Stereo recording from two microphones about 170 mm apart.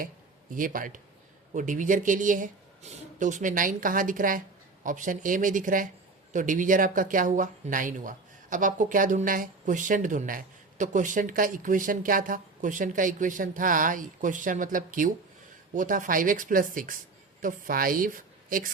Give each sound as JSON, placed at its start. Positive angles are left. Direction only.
{"t": 0.5, "sound": "a woman's voice", "side_deg": -50}